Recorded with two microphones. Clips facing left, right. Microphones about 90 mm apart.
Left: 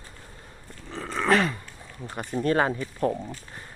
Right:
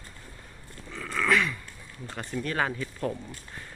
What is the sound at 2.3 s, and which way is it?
Speech, 35° left (ahead or behind).